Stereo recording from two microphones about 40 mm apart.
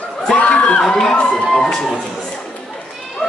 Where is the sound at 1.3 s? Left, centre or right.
Centre.